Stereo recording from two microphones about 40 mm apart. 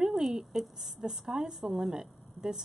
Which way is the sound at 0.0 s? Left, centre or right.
Centre.